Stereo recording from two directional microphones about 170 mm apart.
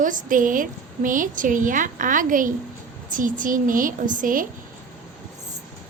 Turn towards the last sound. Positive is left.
turn(degrees=-50)  # may be behind; listen again after turning